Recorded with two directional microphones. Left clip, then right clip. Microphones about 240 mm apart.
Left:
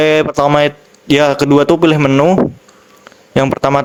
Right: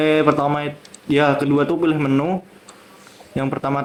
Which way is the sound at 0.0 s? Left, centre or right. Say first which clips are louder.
Left 5 dB; left.